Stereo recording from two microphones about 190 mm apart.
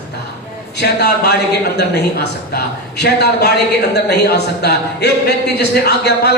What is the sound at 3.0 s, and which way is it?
A man's voice, 60° left (ahead or behind).